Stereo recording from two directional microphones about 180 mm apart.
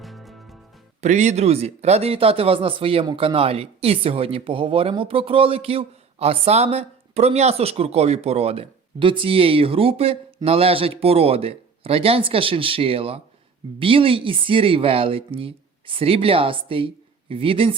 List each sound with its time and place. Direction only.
0.0 s music: centre (ahead or behind)
1.0 s speech: 40° right (ahead or behind)